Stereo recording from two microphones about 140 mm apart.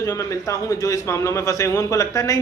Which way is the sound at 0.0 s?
20° left (ahead or behind).